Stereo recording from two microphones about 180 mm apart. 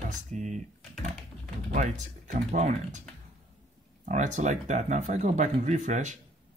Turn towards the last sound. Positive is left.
turn(degrees=-40)  # may be behind; listen again after turning